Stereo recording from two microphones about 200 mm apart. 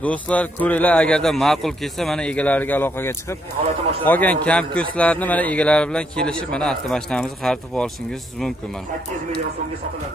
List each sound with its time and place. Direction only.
0.0 s a man's voice: 5° left (ahead or behind)
3.6 s speech: 30° right (ahead or behind)
4.0 s a man's voice: 10° left (ahead or behind)